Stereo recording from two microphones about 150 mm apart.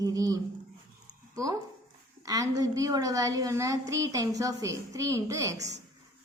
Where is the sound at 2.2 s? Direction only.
25° right (ahead or behind).